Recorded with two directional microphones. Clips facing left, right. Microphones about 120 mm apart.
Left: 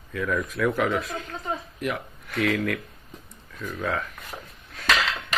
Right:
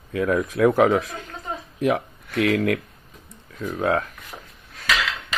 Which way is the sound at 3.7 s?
50° right (ahead or behind).